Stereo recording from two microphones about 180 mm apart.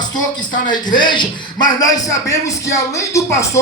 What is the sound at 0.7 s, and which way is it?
Music, 25° left (ahead or behind).